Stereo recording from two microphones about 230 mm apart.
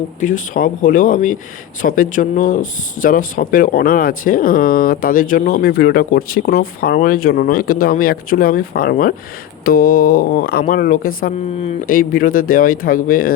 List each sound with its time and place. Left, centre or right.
0.2 s speech: left